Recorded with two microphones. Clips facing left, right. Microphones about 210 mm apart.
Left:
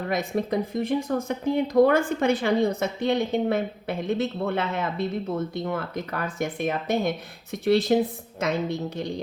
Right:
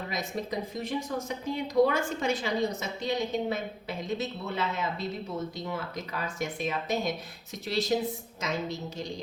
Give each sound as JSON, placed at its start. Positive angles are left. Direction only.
{"t": 0.1, "sound": "a woman's voice", "side_deg": 55}